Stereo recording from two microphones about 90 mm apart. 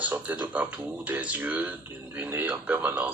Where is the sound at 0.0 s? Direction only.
20° right (ahead or behind).